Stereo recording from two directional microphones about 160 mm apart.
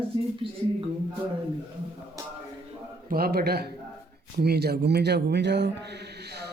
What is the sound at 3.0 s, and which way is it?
A man's voice, 70° right (ahead or behind).